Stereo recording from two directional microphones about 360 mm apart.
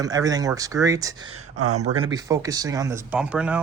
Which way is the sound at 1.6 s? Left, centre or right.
Right.